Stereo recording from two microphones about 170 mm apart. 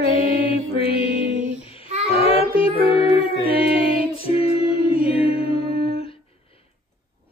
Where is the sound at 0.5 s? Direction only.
35° left (ahead or behind).